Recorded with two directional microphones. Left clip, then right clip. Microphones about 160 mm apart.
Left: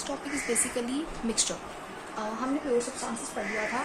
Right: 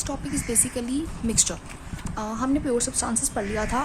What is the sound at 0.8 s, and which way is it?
A woman's voice, 45° right (ahead or behind).